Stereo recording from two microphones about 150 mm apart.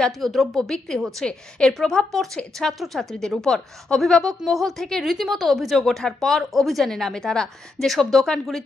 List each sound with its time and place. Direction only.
0.0 s a woman's voice: centre (ahead or behind)